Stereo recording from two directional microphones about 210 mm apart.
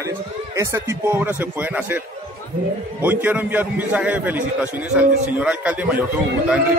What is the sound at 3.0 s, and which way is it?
Speech, 10° right (ahead or behind).